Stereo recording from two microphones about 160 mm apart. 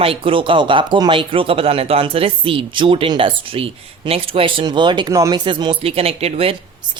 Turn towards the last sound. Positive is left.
turn(degrees=-40)  # may be behind; listen again after turning